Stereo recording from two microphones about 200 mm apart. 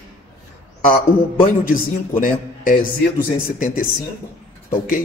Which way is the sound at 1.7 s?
40° left (ahead or behind).